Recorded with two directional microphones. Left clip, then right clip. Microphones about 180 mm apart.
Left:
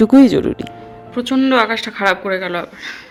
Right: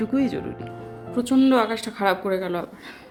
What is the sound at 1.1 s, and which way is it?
Speech, 5° right (ahead or behind).